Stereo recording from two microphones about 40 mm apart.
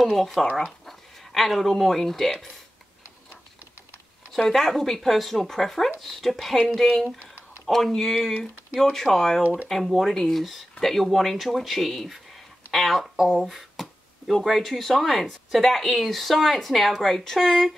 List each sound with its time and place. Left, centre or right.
0.0 s speech: centre
4.5 s speech: centre
9.4 s speech: right
9.7 s speech: centre
13.3 s a sound: centre
14.4 s speech: centre